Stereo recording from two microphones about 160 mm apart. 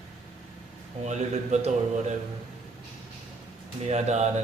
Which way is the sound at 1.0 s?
45° right (ahead or behind).